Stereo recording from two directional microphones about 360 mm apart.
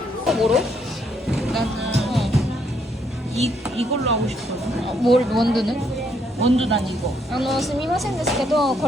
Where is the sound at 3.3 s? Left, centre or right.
Centre.